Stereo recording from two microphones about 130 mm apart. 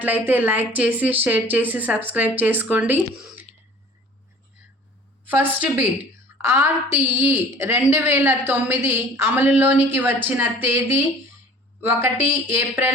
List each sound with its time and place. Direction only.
0.0 s a woman's voice: 15° right (ahead or behind)
5.2 s a woman's voice: 15° right (ahead or behind)